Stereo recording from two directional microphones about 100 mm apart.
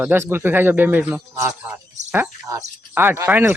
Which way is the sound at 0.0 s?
20° right (ahead or behind).